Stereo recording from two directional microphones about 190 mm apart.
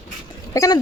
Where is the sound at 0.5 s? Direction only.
20° left (ahead or behind).